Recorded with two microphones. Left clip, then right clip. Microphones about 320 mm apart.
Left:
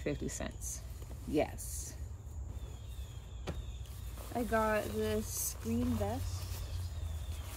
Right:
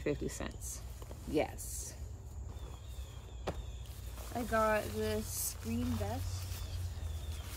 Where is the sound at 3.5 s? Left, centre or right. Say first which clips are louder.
Right 4 dB; centre.